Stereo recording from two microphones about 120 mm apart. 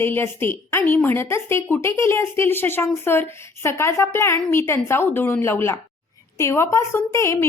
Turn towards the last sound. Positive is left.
turn(degrees=25)  # may be behind; listen again after turning